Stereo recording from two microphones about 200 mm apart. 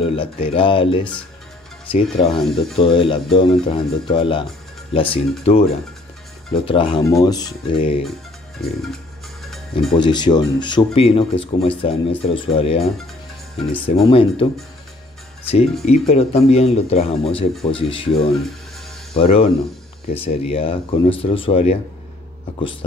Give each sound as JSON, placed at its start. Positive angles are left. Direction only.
{"t": 0.0, "sound": "speech", "side_deg": 30}
{"t": 1.9, "sound": "speech", "side_deg": 25}
{"t": 9.4, "sound": "music", "side_deg": 0}
{"t": 9.9, "sound": "speech", "side_deg": 20}
{"t": 15.8, "sound": "speech", "side_deg": 30}